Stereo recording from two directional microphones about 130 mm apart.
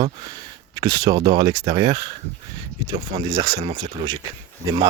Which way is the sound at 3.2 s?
30° right (ahead or behind).